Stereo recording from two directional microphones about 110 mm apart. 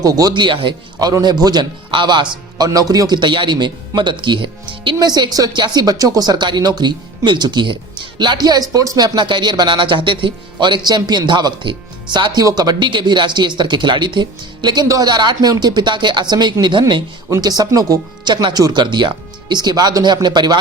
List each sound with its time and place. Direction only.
0.0 s speech: 35° right (ahead or behind)
1.0 s speech: 35° right (ahead or behind)